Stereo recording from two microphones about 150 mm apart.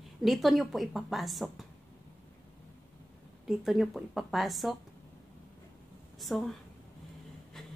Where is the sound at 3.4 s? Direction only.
Centre (ahead or behind).